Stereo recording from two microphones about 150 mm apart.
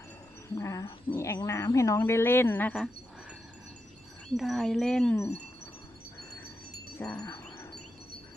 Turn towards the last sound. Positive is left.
turn(degrees=25)  # may be behind; listen again after turning